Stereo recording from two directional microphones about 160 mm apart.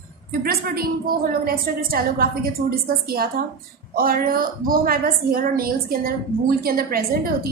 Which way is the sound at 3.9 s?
65° right (ahead or behind).